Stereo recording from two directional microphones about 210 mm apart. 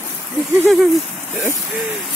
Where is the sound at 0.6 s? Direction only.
Centre (ahead or behind).